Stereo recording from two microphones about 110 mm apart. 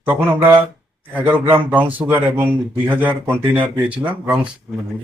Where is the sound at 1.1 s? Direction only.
15° right (ahead or behind).